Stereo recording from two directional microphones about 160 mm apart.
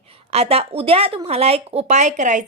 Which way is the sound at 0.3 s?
40° right (ahead or behind).